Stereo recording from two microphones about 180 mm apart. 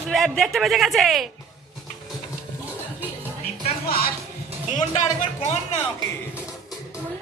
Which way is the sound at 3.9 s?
55° left (ahead or behind).